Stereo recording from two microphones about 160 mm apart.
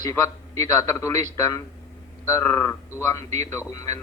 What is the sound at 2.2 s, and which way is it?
A man's voice, 20° left (ahead or behind).